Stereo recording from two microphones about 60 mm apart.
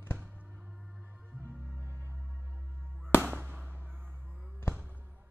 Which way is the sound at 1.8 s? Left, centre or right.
Right.